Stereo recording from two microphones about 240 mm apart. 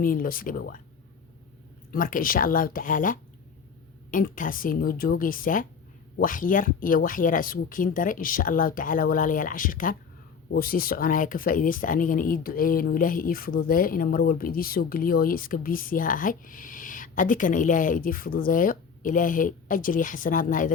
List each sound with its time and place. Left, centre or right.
0.0 s speech: left
1.9 s speech: left